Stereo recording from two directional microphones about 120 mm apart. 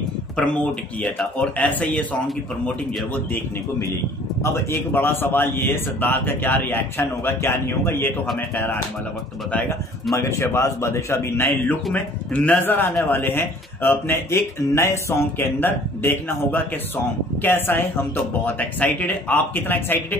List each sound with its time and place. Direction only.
1.1 s speech: 5° left (ahead or behind)
4.4 s speech: 20° left (ahead or behind)
10.1 s a man's voice: 25° left (ahead or behind)